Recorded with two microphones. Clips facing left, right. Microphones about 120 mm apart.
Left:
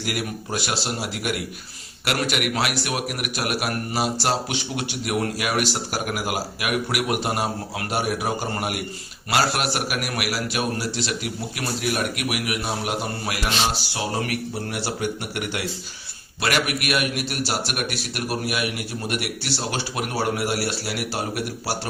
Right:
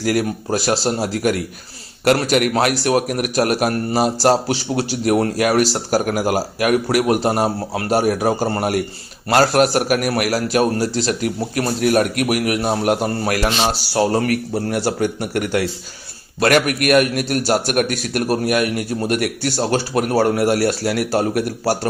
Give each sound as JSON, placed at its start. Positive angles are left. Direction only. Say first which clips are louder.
{"t": 0.0, "sound": "a man's voice", "louder": "right 9 dB", "side_deg": -40}